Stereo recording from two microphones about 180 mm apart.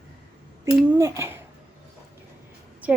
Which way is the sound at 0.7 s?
10° right (ahead or behind).